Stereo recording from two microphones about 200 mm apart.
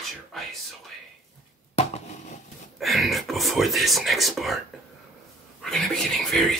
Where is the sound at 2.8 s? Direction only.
Centre (ahead or behind).